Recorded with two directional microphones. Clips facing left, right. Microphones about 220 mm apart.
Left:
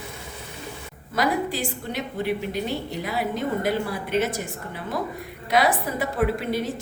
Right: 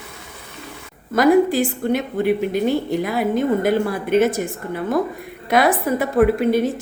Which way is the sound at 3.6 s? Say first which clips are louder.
Right 7 dB; 50° right (ahead or behind).